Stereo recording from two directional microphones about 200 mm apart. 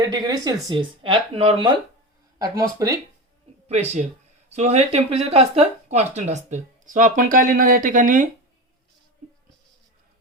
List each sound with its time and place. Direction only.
0.0 s speech: 20° right (ahead or behind)
3.7 s speech: 35° right (ahead or behind)